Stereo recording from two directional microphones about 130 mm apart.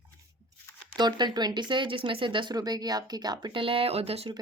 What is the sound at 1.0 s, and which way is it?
Speech, 35° right (ahead or behind).